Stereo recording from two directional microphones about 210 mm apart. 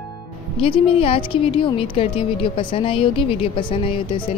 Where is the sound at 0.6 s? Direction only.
25° left (ahead or behind).